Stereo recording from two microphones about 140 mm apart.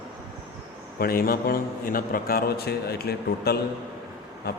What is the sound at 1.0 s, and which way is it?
A man's voice, 90° left.